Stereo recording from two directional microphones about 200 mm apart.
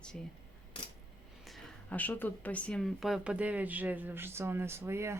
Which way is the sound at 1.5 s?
5° left (ahead or behind).